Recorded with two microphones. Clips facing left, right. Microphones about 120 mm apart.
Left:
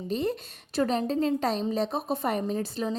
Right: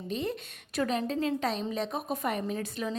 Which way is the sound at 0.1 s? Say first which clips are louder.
Left 4 dB; 35° left (ahead or behind).